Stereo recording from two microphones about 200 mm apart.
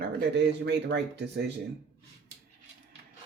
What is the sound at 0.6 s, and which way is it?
Speech, 60° right (ahead or behind).